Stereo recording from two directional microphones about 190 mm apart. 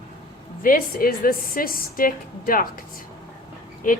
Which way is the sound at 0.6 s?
50° left (ahead or behind).